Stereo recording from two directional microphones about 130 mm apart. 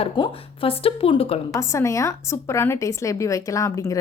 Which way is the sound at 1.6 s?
20° left (ahead or behind).